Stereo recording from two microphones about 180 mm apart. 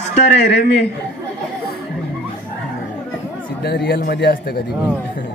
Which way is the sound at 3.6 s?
60° left (ahead or behind).